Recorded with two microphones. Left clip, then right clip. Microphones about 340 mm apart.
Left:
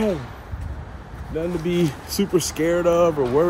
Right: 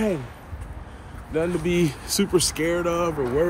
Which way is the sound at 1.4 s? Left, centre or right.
Centre.